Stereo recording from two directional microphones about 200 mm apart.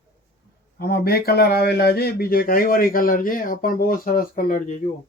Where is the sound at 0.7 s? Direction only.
50° left (ahead or behind).